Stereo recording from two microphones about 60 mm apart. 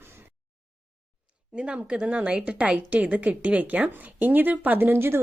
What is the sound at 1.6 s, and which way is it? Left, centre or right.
A woman's voice, right.